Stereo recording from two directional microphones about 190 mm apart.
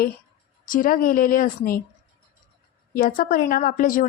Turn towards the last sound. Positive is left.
turn(degrees=45)  # may be behind; listen again after turning